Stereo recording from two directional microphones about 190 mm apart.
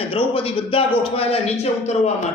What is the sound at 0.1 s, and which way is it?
A man's voice, 30° left (ahead or behind).